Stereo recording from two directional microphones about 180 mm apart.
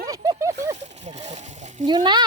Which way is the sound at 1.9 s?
25° right (ahead or behind).